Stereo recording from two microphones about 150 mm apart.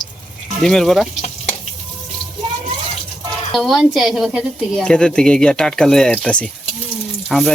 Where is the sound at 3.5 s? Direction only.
Centre (ahead or behind).